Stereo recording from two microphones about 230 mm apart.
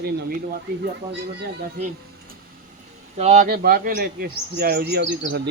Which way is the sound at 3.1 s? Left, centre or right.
Right.